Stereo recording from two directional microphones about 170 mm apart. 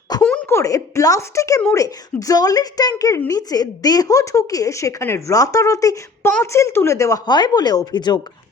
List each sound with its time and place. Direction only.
0.2 s a woman's voice: 5° left (ahead or behind); by 8.2 s 25° left (ahead or behind)